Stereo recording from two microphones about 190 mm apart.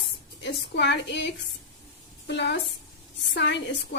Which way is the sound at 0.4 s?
65° left (ahead or behind).